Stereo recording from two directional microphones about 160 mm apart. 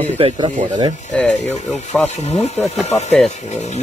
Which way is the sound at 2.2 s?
40° left (ahead or behind).